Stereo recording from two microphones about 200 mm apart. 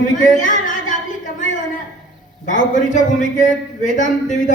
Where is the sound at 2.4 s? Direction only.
40° left (ahead or behind).